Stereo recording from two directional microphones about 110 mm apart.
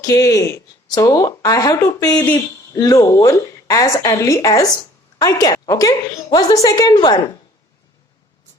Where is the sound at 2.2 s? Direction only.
20° left (ahead or behind).